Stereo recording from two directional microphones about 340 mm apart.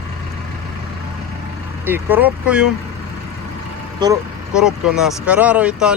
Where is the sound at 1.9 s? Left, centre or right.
Centre.